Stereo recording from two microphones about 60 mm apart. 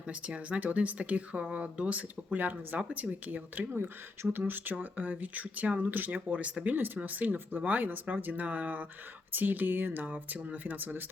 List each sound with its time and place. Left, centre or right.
0.1 s speech: right
6.7 s speech: right